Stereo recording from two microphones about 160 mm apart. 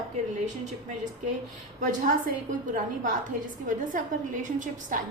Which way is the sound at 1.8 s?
55° right (ahead or behind).